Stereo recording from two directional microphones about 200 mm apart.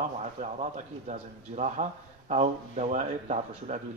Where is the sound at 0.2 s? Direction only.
35° right (ahead or behind).